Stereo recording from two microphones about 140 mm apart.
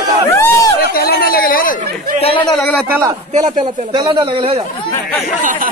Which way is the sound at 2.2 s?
35° left (ahead or behind).